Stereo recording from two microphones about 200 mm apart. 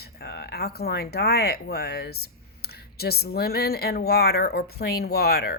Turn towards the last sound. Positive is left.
turn(degrees=50)  # may be behind; listen again after turning